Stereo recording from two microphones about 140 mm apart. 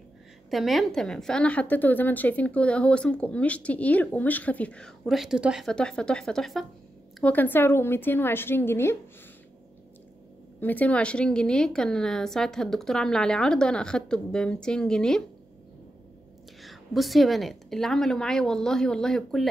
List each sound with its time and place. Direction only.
0.5 s a woman's voice: centre (ahead or behind); by 8.9 s 15° left (ahead or behind)
10.6 s a woman's voice: 10° left (ahead or behind)
16.6 s a woman's voice: centre (ahead or behind)